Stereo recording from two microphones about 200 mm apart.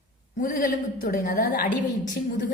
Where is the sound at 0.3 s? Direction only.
45° left (ahead or behind).